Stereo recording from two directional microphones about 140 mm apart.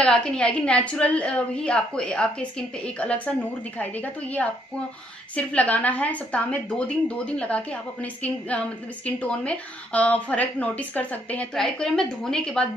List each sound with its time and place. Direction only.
0.0 s a woman's voice: 5° left (ahead or behind)